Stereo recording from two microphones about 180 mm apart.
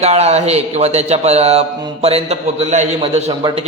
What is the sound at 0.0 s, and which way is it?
A man's voice, 35° right (ahead or behind).